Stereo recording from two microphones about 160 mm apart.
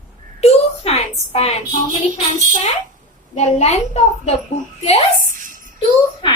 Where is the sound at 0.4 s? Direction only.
40° left (ahead or behind).